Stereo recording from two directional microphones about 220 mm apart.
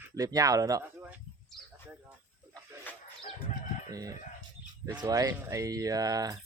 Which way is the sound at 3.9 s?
15° right (ahead or behind).